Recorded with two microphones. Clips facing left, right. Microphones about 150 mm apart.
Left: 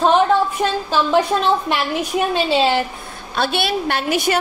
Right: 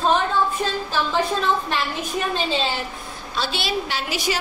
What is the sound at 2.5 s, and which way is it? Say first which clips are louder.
Speech: left 8 dB; 75° left (ahead or behind).